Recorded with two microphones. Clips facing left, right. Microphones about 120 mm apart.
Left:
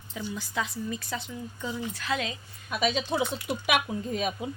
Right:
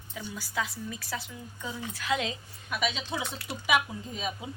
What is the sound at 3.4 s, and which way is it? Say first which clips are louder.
Speech: left 1 dB; 60° left (ahead or behind).